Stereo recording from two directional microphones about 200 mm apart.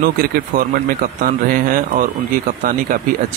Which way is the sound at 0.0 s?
45° right (ahead or behind).